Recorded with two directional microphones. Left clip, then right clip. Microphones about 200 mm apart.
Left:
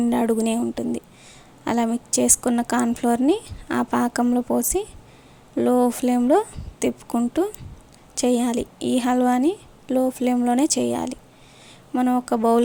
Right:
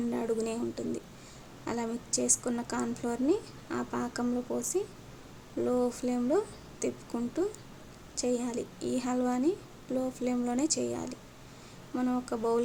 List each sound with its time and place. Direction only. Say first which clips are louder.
0.1 s a woman's voice: left 10 dB; 45° left (ahead or behind)